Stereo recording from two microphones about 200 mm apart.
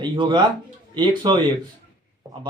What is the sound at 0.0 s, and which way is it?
Speech, 25° right (ahead or behind).